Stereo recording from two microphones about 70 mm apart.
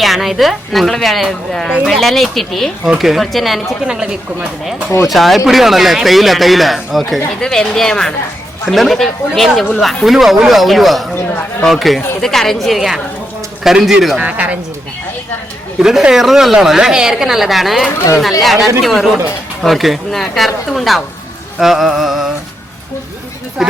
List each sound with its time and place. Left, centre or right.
0.0 s a woman's voice: centre
3.8 s speech: centre
5.0 s a woman's voice: centre
14.2 s speech: right
15.8 s a woman's voice: centre
23.6 s a woman's voice: centre